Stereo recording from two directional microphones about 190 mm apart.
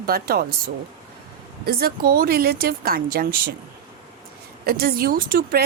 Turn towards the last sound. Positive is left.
turn(degrees=-50)  # may be behind; listen again after turning